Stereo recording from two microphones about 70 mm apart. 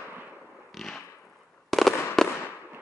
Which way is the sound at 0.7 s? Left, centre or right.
Centre.